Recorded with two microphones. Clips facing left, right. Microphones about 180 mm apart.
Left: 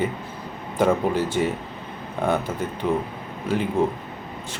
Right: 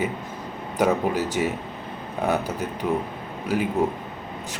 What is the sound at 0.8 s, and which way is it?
Speech, 10° right (ahead or behind).